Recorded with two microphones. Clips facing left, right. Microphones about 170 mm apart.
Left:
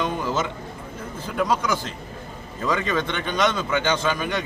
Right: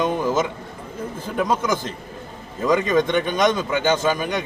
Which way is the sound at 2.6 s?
15° right (ahead or behind).